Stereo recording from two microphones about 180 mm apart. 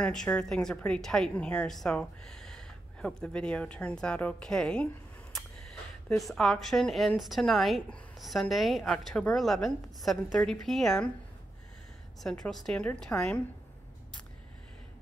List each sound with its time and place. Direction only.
0.0 s a woman's voice: 5° left (ahead or behind)
6.0 s a woman's voice: centre (ahead or behind)
12.2 s a woman's voice: centre (ahead or behind)